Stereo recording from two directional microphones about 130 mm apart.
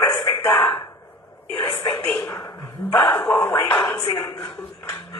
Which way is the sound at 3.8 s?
35° left (ahead or behind).